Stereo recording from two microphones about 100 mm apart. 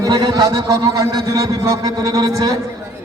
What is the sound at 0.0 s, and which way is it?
A man's voice, 40° right (ahead or behind).